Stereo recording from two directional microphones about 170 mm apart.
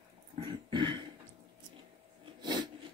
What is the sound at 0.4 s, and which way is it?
Cough, 25° right (ahead or behind).